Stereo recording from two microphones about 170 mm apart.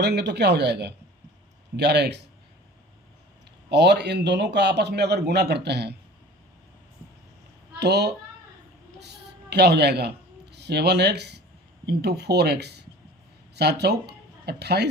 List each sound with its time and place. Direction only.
0.0 s a man's voice: 75° right (ahead or behind)
3.7 s a man's voice: 85° right
7.8 s speech: 75° right (ahead or behind)
9.0 s a sound: 80° right
11.9 s speech: 75° right (ahead or behind)